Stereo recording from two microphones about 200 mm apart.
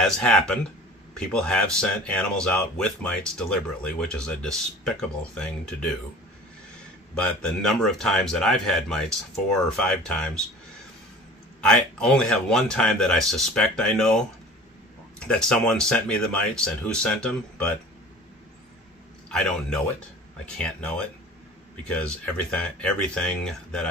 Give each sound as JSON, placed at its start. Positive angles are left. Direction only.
{"t": 0.0, "sound": "speech", "side_deg": 5}
{"t": 7.2, "sound": "speech", "side_deg": 5}
{"t": 11.6, "sound": "speech", "side_deg": 5}
{"t": 19.2, "sound": "a man's voice", "side_deg": 5}